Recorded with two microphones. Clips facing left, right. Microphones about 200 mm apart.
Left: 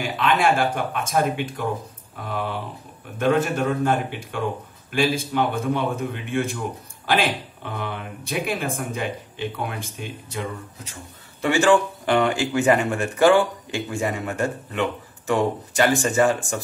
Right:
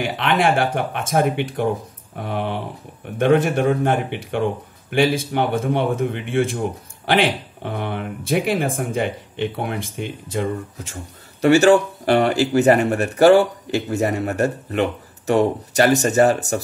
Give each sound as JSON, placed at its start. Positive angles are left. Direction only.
{"t": 0.0, "sound": "speech", "side_deg": -55}
{"t": 7.6, "sound": "speech", "side_deg": -55}
{"t": 11.6, "sound": "speech", "side_deg": -40}